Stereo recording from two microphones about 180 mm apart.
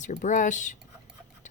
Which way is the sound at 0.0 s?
45° left (ahead or behind).